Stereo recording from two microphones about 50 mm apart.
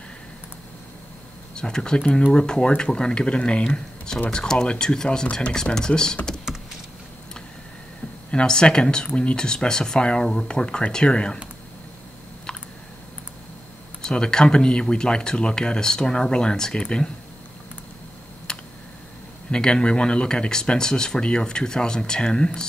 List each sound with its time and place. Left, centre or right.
1.5 s speech: centre
8.3 s speech: centre
14.0 s speech: centre
18.5 s a sound: centre
19.5 s speech: centre